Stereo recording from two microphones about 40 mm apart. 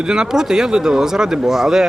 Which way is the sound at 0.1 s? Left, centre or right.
Centre.